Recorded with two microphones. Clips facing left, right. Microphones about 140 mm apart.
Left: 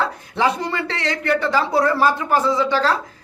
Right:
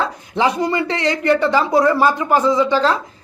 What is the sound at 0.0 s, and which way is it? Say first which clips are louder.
A man's voice: right 2 dB; 15° right (ahead or behind).